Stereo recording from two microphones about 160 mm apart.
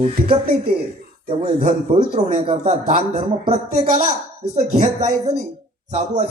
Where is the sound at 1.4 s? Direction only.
40° right (ahead or behind).